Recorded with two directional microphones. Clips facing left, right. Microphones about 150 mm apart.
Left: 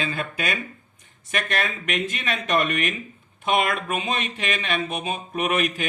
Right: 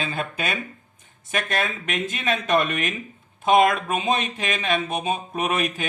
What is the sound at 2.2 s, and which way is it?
Speech, 25° right (ahead or behind).